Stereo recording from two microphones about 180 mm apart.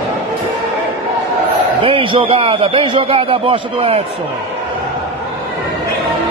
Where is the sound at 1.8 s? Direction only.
30° right (ahead or behind).